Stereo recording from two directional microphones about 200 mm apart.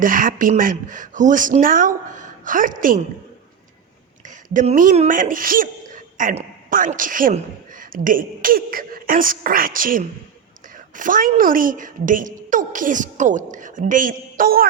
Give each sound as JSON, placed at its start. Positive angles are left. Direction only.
{"t": 0.0, "sound": "a woman's voice", "side_deg": -45}
{"t": 4.5, "sound": "a woman's voice", "side_deg": -40}